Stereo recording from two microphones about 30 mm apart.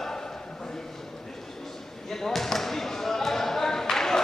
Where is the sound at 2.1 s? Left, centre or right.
Centre.